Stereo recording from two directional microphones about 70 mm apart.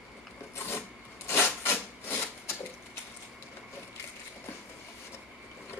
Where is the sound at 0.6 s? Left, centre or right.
Left.